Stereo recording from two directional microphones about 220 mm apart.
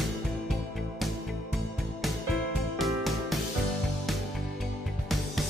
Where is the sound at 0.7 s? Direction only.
Centre (ahead or behind).